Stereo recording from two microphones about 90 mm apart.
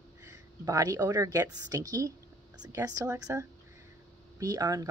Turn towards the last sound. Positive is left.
turn(degrees=-40)  # may be behind; listen again after turning